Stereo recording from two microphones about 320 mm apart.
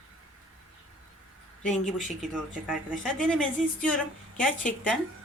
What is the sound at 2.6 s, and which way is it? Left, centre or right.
A woman's voice, centre.